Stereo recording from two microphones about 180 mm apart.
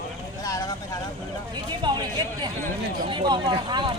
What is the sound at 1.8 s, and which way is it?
Speech, 25° right (ahead or behind).